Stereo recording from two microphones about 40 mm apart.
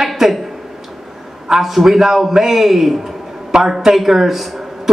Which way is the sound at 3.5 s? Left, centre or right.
Centre.